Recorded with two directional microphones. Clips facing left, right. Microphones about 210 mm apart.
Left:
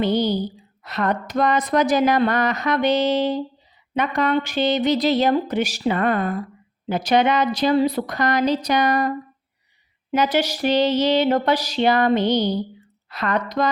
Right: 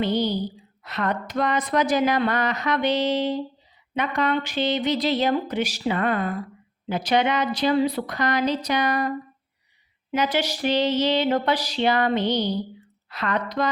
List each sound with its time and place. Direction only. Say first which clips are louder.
0.8 s speech: left 3 dB; 40° left (ahead or behind)